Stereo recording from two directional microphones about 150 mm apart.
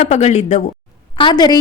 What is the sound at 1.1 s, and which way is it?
Speech, 30° left (ahead or behind).